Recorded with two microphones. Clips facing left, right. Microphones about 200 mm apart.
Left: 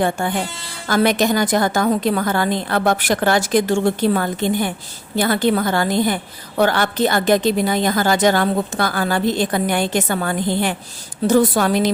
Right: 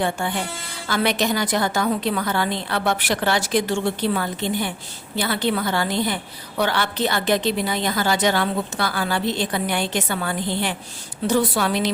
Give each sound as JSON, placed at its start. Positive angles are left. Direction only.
{"t": 0.0, "sound": "a woman's voice", "side_deg": 50}